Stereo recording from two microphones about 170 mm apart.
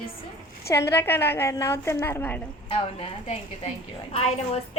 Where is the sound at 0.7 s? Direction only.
15° left (ahead or behind).